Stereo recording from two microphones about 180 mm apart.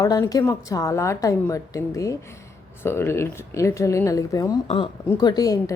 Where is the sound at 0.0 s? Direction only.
20° left (ahead or behind).